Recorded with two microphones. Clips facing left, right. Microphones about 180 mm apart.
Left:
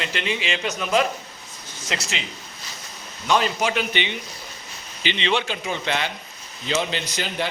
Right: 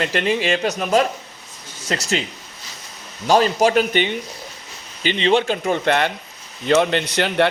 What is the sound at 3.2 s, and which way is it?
A man's voice, 40° right (ahead or behind).